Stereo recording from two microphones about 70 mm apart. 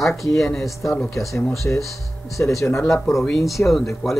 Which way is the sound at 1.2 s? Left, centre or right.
Left.